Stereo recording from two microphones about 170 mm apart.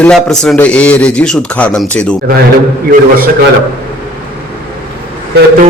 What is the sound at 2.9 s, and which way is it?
Speech, 60° right (ahead or behind).